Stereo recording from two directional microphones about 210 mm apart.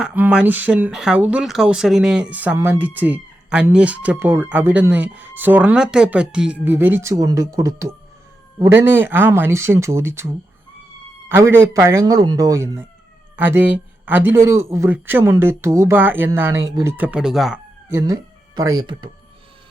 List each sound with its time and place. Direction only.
0.0 s speech: 5° right (ahead or behind)
17.9 s speech: 15° right (ahead or behind)